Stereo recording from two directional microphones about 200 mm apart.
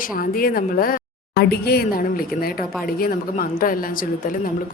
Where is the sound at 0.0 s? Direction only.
45° left (ahead or behind).